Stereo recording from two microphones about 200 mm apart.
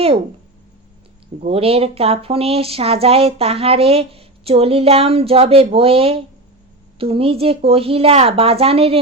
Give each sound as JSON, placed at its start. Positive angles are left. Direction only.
{"t": 1.4, "sound": "speech", "side_deg": -30}